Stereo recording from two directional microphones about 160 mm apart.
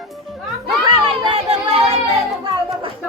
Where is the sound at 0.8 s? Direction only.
30° right (ahead or behind).